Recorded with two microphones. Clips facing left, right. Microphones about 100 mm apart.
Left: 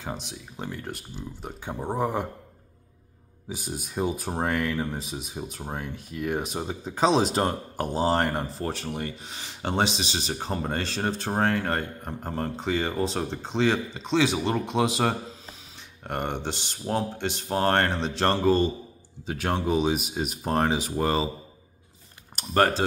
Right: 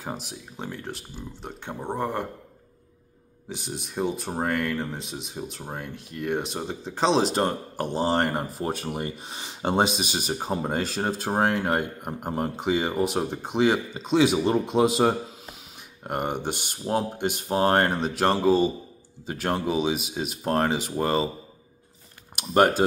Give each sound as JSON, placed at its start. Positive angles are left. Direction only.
{"t": 0.0, "sound": "speech", "side_deg": -5}
{"t": 3.4, "sound": "speech", "side_deg": 5}
{"t": 8.6, "sound": "speech", "side_deg": -20}
{"t": 22.3, "sound": "speech", "side_deg": -10}